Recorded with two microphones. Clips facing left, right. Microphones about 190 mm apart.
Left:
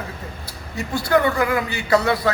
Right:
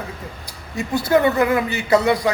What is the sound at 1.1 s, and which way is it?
Speech, 20° right (ahead or behind).